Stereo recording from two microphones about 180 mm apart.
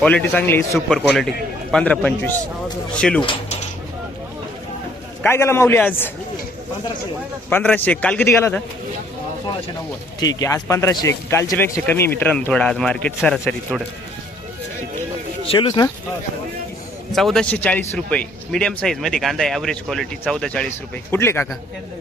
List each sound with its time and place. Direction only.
0.0 s a man's voice: 10° left (ahead or behind)
0.9 s a man's voice: centre (ahead or behind)
3.2 s speech: 30° left (ahead or behind)
5.2 s a man's voice: 15° left (ahead or behind)
7.5 s a man's voice: 5° left (ahead or behind)
10.2 s a man's voice: 20° left (ahead or behind); by 13.8 s 5° left (ahead or behind)
15.4 s speech: 25° left (ahead or behind)
17.1 s a man's voice: centre (ahead or behind)